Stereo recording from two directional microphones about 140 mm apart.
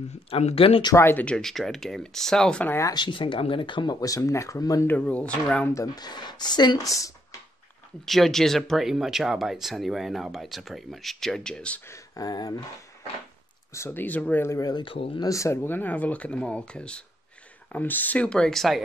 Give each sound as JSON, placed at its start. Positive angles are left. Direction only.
{"t": 0.3, "sound": "speech", "side_deg": 45}
{"t": 0.9, "sound": "speech", "side_deg": 15}
{"t": 2.9, "sound": "speech", "side_deg": 35}
{"t": 4.8, "sound": "speech", "side_deg": 10}
{"t": 5.7, "sound": "speech", "side_deg": 25}
{"t": 8.0, "sound": "speech", "side_deg": 0}
{"t": 11.9, "sound": "speech", "side_deg": 30}
{"t": 13.7, "sound": "speech", "side_deg": 15}
{"t": 15.2, "sound": "speech", "side_deg": 20}